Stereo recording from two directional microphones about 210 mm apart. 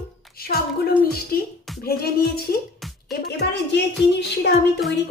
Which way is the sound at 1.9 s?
45° left (ahead or behind).